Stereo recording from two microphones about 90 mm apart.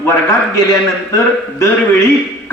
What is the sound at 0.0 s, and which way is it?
A man's voice, 30° left (ahead or behind).